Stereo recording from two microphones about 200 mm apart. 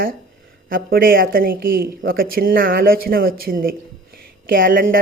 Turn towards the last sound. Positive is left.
turn(degrees=-45)  # may be behind; listen again after turning